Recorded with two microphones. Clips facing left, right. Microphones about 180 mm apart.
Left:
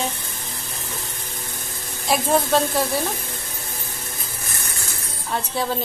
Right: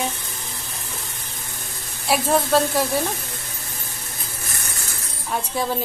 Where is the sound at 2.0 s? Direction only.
10° right (ahead or behind).